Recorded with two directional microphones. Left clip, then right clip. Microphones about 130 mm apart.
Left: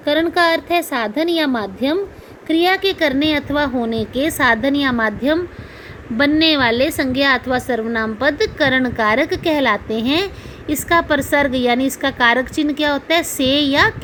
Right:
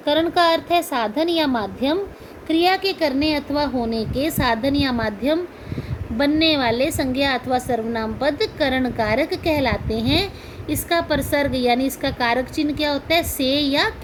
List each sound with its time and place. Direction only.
0.0 s a woman's voice: 45° left (ahead or behind)
6.4 s a woman's voice: 40° left (ahead or behind)